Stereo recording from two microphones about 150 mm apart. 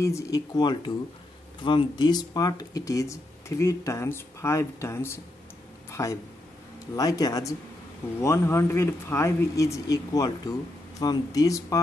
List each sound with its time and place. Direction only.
0.0 s speech: 20° left (ahead or behind)
5.9 s a sound: 20° left (ahead or behind)
7.0 s speech: 25° left (ahead or behind)